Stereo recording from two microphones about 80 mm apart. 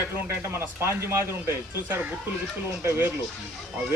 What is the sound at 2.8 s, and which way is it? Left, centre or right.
Speech, right.